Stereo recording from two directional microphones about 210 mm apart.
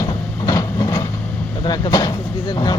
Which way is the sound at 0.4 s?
20° left (ahead or behind).